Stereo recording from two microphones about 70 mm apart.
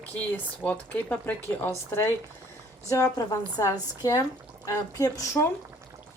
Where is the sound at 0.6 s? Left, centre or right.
Centre.